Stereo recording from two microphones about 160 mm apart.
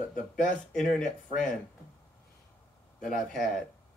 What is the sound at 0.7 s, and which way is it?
Speech, 5° left (ahead or behind).